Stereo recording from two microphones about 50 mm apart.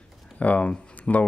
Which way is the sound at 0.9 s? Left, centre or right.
Left.